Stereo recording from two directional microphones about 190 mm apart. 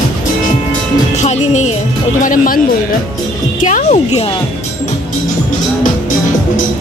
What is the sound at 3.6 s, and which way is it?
Speech, 40° left (ahead or behind).